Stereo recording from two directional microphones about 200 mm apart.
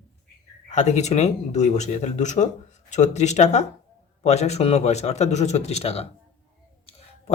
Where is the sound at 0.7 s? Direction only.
35° left (ahead or behind).